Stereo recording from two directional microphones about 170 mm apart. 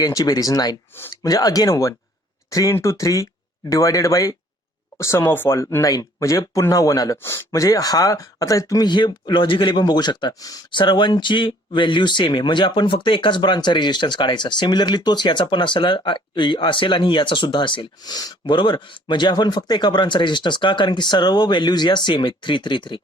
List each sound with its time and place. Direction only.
0.0 s speech: 20° left (ahead or behind)